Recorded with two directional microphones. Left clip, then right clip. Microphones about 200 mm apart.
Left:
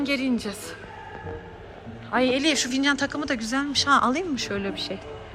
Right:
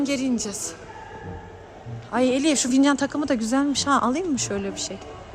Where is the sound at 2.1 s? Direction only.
20° right (ahead or behind).